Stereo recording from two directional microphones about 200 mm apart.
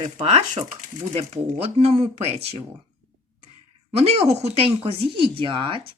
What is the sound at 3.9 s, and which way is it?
Speech, 30° right (ahead or behind).